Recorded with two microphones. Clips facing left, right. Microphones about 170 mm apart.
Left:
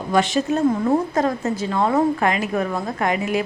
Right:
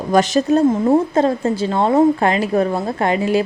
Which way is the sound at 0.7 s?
25° right (ahead or behind).